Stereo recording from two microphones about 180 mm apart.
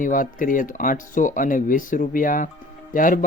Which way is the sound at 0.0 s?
50° left (ahead or behind).